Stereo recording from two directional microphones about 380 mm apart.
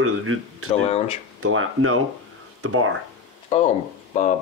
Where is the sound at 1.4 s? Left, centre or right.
Right.